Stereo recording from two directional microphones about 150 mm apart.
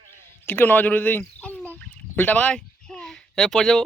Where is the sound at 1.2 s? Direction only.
10° left (ahead or behind).